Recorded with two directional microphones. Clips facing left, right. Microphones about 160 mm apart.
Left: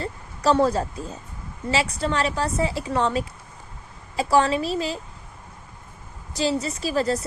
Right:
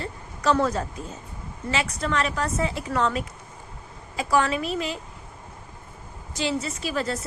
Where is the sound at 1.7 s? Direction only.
30° left (ahead or behind).